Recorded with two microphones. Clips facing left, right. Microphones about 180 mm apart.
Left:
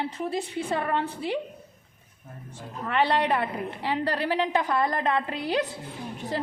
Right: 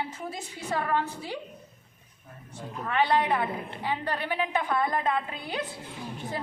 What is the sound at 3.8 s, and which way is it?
Speech, 75° left (ahead or behind).